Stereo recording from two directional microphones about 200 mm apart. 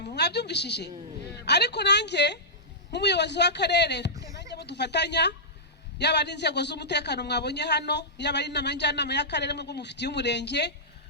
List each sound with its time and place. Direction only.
0.0 s a woman's voice: 55° left (ahead or behind)
4.1 s a sound: 15° right (ahead or behind)
4.5 s a woman's voice: 60° left (ahead or behind)